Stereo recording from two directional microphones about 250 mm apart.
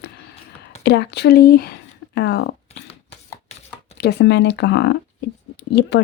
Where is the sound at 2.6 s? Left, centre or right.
Left.